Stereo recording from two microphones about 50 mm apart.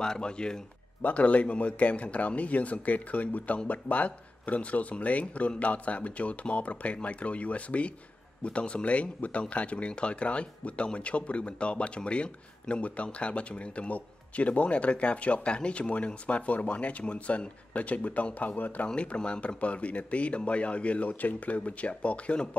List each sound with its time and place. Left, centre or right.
0.0 s speech: centre
1.0 s speech: left